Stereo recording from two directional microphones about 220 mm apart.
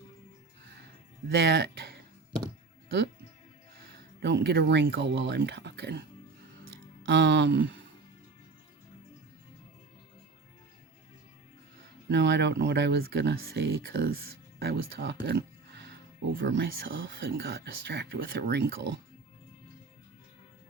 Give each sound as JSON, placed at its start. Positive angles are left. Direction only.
{"t": 1.4, "sound": "speech", "side_deg": -50}
{"t": 4.2, "sound": "speech", "side_deg": -50}
{"t": 7.0, "sound": "music", "side_deg": -55}
{"t": 12.0, "sound": "speech", "side_deg": -50}